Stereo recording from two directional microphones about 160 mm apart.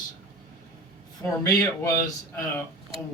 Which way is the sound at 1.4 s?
20° left (ahead or behind).